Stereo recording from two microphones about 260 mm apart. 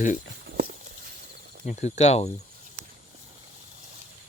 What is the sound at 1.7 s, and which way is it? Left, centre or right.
Speech, left.